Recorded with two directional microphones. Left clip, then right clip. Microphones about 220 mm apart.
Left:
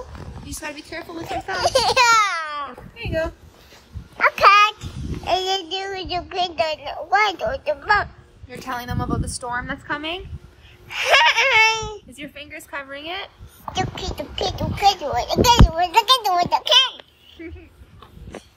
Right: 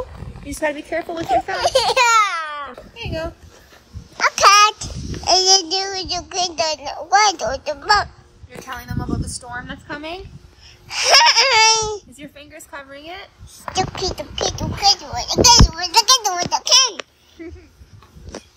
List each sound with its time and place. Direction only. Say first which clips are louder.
1.4 s a sound: right 2 dB; 10° left (ahead or behind)
3.0 s a woman's voice: left 3 dB; 20° right (ahead or behind)
4.2 s a child's voice: right 1 dB; 10° right (ahead or behind)
8.5 s a sound: left 3 dB; 35° left (ahead or behind)
9.4 s a woman's voice: left 4 dB; 25° left (ahead or behind)
9.8 s a child's voice: left 3 dB; 5° right (ahead or behind)
17.4 s speech: right 1 dB; 35° right (ahead or behind)